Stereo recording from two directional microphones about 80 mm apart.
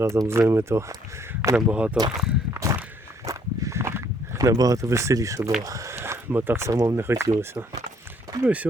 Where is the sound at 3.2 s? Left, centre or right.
Right.